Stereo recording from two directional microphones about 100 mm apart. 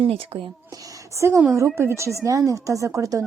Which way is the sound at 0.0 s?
65° right (ahead or behind).